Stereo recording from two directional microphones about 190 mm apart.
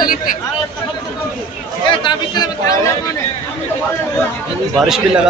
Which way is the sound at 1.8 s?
25° left (ahead or behind).